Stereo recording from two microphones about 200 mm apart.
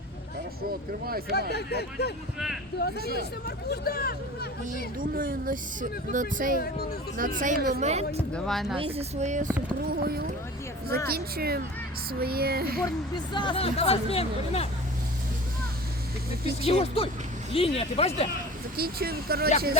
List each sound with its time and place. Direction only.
1.3 s speech: 55° left (ahead or behind)
4.9 s speech: 45° right (ahead or behind)
7.8 s speech: 35° right (ahead or behind)
8.3 s speech: centre (ahead or behind)
8.8 s speech: 30° right (ahead or behind)
9.9 s speech: 50° right (ahead or behind)
12.8 s speech: 20° left (ahead or behind)
16.6 s speech: 30° left (ahead or behind)
18.8 s speech: 50° right (ahead or behind)